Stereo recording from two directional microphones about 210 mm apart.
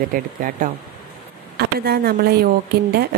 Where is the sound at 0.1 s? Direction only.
40° right (ahead or behind).